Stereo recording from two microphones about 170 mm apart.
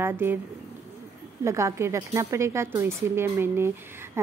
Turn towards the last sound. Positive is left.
turn(degrees=-15)  # may be behind; listen again after turning